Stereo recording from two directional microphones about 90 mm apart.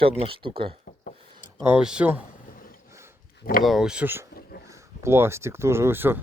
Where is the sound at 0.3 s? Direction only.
80° right.